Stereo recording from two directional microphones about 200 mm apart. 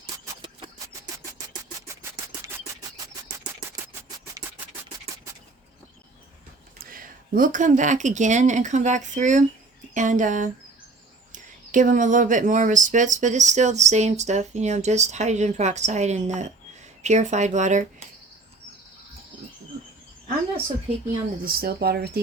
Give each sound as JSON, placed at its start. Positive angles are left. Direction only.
{"t": 0.0, "sound": "a sound", "side_deg": -25}
{"t": 6.7, "sound": "speech", "side_deg": -45}
{"t": 21.4, "sound": "speech", "side_deg": -50}